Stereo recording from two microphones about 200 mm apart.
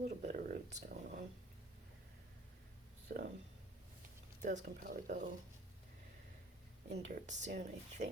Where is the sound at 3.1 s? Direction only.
50° right (ahead or behind).